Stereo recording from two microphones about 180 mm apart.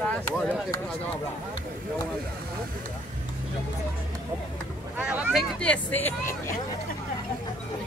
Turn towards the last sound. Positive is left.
turn(degrees=10)  # may be behind; listen again after turning